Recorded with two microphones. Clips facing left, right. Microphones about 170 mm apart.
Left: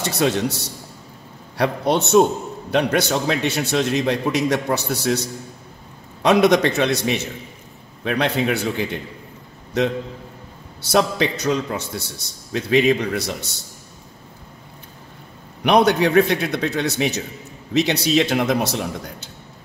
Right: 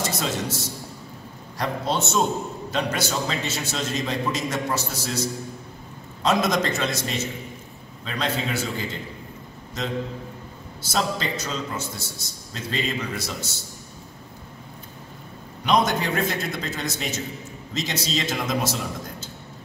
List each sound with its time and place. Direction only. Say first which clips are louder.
0.0 s a man's voice: left 7 dB; 65° left (ahead or behind)
6.2 s a man's voice: left 7 dB; 65° left (ahead or behind)
10.8 s a man's voice: left 7 dB; 65° left (ahead or behind)
15.6 s a man's voice: left 6 dB; 65° left (ahead or behind)